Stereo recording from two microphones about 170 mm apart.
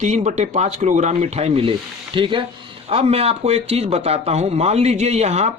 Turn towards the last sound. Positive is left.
turn(degrees=-40)  # may be behind; listen again after turning